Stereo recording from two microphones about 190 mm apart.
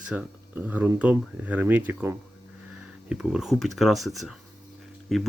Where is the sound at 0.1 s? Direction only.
5° right (ahead or behind).